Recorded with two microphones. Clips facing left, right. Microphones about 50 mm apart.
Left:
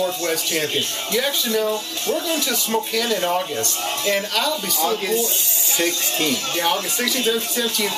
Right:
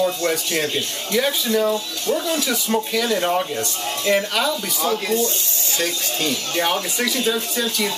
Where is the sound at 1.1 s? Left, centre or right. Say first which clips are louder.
Right 2 dB; centre.